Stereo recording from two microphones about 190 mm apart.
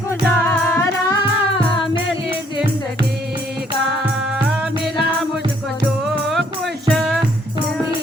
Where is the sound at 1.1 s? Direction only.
25° left (ahead or behind).